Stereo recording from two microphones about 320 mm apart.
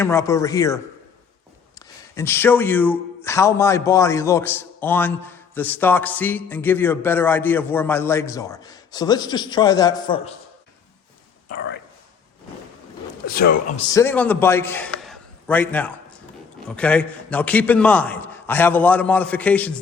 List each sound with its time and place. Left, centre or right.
0.0 s a man's voice: centre
2.1 s a man's voice: centre
11.5 s speech: left
13.2 s speech: left
13.9 s a man's voice: centre